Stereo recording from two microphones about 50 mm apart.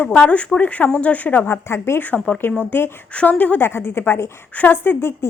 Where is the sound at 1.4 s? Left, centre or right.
Left.